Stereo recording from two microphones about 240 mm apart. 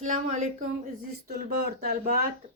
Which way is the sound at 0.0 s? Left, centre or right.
Right.